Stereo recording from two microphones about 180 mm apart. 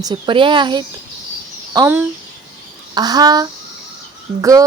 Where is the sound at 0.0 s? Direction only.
25° right (ahead or behind).